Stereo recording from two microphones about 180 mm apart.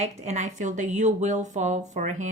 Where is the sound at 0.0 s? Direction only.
40° right (ahead or behind).